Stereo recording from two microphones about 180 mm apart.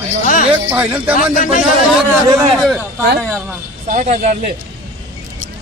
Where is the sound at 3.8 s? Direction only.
45° right (ahead or behind).